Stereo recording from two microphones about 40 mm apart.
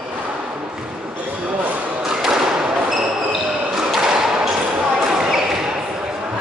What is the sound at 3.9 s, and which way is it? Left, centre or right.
Thump, right.